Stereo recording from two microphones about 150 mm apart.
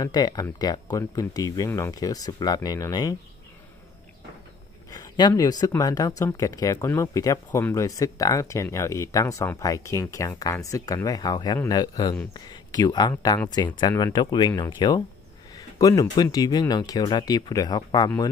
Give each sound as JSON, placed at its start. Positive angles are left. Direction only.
{"t": 0.0, "sound": "speech", "side_deg": 25}
{"t": 4.9, "sound": "speech", "side_deg": 25}